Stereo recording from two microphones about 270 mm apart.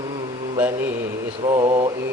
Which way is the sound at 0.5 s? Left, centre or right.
Centre.